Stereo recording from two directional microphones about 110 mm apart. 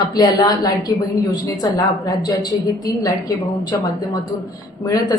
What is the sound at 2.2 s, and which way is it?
A woman's voice, 35° left (ahead or behind).